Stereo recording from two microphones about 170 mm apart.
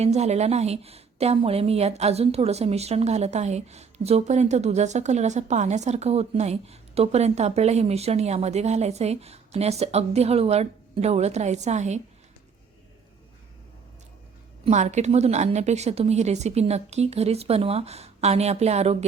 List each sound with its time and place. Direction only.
0.0 s a woman's voice: 40° right (ahead or behind)
14.6 s a woman's voice: 45° right (ahead or behind)